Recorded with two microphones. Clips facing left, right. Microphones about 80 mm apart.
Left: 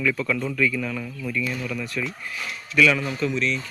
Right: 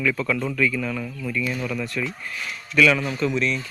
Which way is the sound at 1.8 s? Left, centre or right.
Centre.